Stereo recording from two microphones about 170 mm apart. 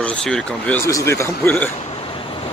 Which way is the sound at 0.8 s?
15° left (ahead or behind).